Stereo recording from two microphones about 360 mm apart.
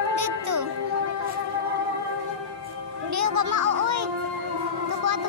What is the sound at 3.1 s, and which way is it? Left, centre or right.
Music, right.